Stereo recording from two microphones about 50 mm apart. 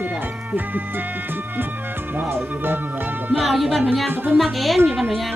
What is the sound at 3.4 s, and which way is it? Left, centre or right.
Speech, centre.